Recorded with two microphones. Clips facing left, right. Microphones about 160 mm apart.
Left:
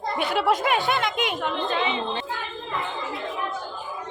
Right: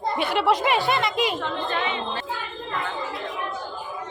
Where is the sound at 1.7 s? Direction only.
20° left (ahead or behind).